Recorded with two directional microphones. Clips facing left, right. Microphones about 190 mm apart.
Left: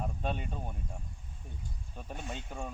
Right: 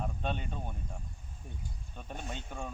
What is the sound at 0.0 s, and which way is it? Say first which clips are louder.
Speech: even; 5° left (ahead or behind).